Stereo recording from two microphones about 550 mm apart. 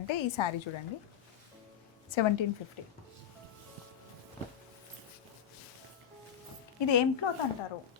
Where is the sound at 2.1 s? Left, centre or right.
Left.